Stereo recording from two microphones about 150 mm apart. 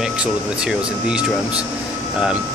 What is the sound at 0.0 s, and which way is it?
Speech, 5° right (ahead or behind).